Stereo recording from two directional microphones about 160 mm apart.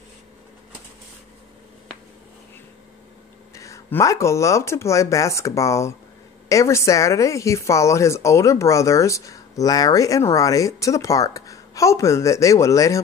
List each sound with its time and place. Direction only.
3.5 s speech: 20° left (ahead or behind)